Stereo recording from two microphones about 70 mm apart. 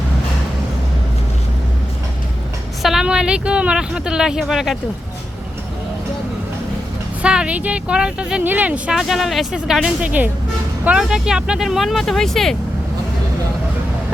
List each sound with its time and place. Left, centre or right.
2.8 s a woman's voice: centre
7.2 s a woman's voice: centre
8.4 s speech: right
8.9 s speech: centre
10.0 s speech: right
11.0 s speech: centre